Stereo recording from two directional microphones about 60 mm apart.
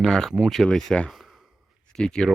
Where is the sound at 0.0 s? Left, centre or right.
Centre.